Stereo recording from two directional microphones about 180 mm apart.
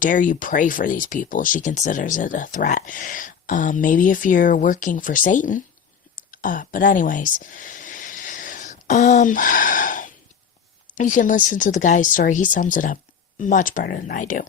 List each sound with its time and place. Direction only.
0.0 s speech: 50° left (ahead or behind)
6.1 s a sound: 50° left (ahead or behind)
10.9 s speech: 45° left (ahead or behind)